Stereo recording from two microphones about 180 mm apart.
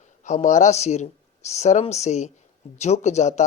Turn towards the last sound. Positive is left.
turn(degrees=40)  # may be behind; listen again after turning